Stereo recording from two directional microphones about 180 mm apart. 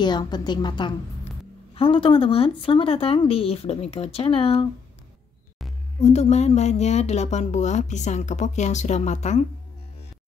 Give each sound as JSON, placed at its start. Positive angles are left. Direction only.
{"t": 0.0, "sound": "a woman's voice", "side_deg": 25}
{"t": 5.9, "sound": "a woman's voice", "side_deg": 35}